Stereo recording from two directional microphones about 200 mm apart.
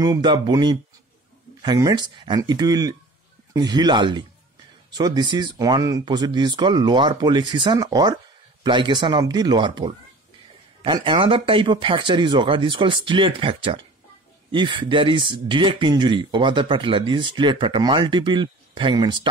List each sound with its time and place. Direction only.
0.0 s speech: 20° right (ahead or behind)